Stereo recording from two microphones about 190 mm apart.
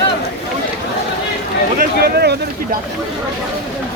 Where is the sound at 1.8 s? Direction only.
55° right (ahead or behind).